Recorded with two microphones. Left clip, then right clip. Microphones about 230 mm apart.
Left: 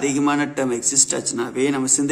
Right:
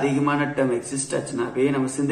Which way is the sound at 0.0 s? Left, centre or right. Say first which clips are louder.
Left 2 dB; left.